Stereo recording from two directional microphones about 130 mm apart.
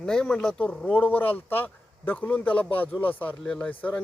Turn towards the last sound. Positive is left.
turn(degrees=10)  # may be behind; listen again after turning